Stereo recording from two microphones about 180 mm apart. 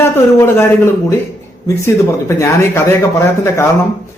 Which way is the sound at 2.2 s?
15° left (ahead or behind).